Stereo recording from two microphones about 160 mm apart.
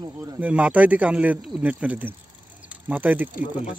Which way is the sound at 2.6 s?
10° right (ahead or behind).